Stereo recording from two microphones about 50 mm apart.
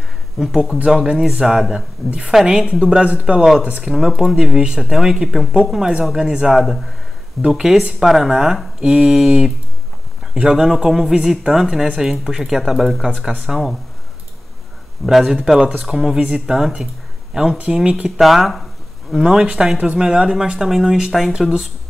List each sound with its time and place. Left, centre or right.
0.4 s speech: centre
2.8 s speech: centre
3.9 s speech: centre
5.5 s speech: centre
6.6 s speech: centre
10.5 s speech: centre
15.0 s speech: centre
18.2 s speech: centre
19.8 s speech: centre